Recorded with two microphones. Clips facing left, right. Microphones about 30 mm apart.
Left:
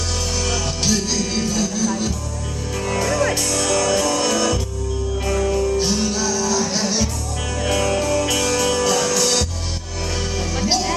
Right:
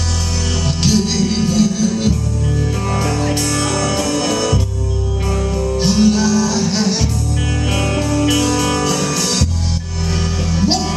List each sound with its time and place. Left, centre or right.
0.8 s music: right
3.2 s music: right
3.7 s music: centre
5.8 s music: right
7.7 s music: centre